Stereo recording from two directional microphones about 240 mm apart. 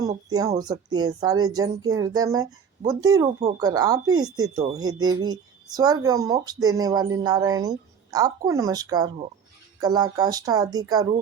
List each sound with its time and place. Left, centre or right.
0.3 s speech: centre